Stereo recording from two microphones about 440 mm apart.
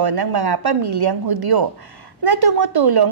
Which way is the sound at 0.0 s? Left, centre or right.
Right.